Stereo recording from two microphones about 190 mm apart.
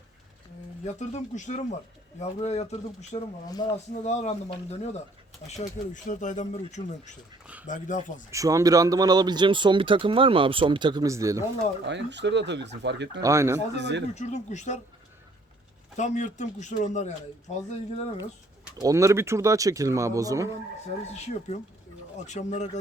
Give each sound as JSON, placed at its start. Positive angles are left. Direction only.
{"t": 0.9, "sound": "speech", "side_deg": 40}
{"t": 3.6, "sound": "speech", "side_deg": 20}
{"t": 4.0, "sound": "speech", "side_deg": 35}
{"t": 8.3, "sound": "speech", "side_deg": -15}
{"t": 11.9, "sound": "speech", "side_deg": -70}
{"t": 13.2, "sound": "speech", "side_deg": -15}
{"t": 13.7, "sound": "speech", "side_deg": -65}
{"t": 14.2, "sound": "speech", "side_deg": 35}
{"t": 16.0, "sound": "speech", "side_deg": 40}
{"t": 18.8, "sound": "speech", "side_deg": -15}
{"t": 21.1, "sound": "speech", "side_deg": 35}